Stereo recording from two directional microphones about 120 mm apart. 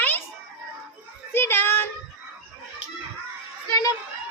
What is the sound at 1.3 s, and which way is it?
Child singing, 20° left (ahead or behind).